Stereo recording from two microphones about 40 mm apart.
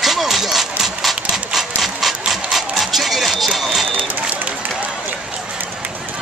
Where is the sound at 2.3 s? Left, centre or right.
Centre.